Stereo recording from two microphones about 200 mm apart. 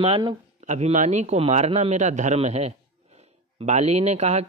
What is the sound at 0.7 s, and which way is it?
A man's voice, 35° right (ahead or behind).